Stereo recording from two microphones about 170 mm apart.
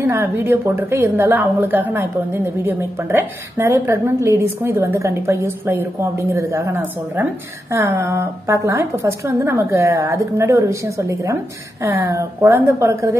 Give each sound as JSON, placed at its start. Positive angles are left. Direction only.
{"t": 0.0, "sound": "a woman's voice", "side_deg": -10}